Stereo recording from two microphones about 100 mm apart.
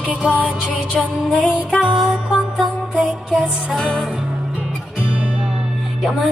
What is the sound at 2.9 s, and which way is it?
Music, 10° right (ahead or behind).